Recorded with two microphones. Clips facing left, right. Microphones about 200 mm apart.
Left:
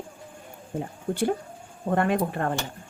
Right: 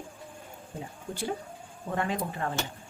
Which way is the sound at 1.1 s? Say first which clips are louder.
Left 8 dB; 50° left (ahead or behind).